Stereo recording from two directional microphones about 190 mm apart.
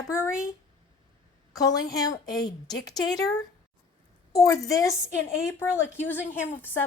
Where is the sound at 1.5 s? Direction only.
20° left (ahead or behind).